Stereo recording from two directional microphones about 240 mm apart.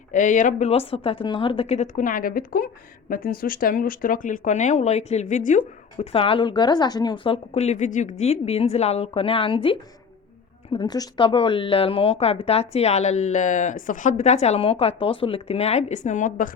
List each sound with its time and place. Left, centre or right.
0.1 s speech: left